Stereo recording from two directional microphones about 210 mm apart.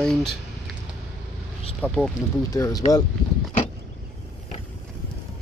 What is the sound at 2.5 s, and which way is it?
Speech, 15° left (ahead or behind).